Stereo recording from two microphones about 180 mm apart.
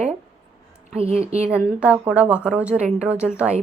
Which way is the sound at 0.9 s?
35° right (ahead or behind).